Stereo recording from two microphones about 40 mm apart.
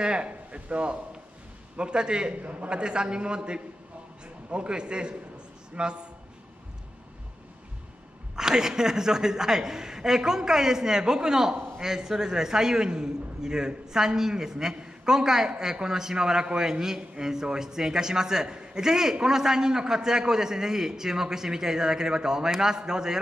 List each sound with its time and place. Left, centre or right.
0.0 s speech: right
2.4 s a man's voice: right
2.7 s speech: right
8.4 s a man's voice: centre
18.9 s a man's voice: centre